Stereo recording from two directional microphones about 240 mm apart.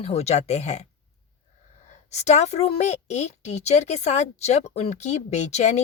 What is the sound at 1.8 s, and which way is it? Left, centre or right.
A woman's voice, left.